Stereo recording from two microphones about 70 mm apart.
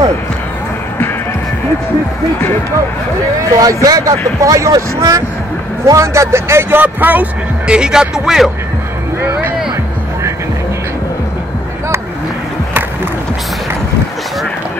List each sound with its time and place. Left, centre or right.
3.5 s a man's voice: right
6.8 s speech: right
7.6 s speech: centre
9.2 s music: right